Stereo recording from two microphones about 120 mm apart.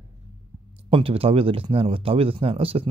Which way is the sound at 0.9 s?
50° right (ahead or behind).